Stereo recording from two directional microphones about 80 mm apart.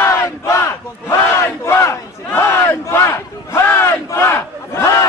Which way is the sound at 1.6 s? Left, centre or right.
Left.